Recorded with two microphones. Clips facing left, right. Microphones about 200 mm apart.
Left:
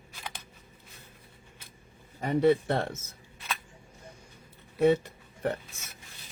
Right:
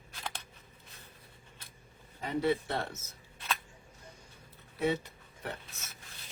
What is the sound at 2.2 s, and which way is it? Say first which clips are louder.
Speech: left 7 dB; 55° left (ahead or behind).